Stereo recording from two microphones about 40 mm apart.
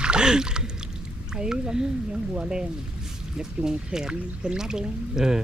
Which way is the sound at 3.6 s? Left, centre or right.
Centre.